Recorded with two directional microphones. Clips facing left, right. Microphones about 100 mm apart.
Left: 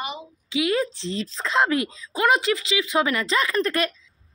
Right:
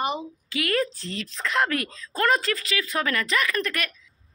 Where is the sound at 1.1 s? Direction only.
30° left (ahead or behind).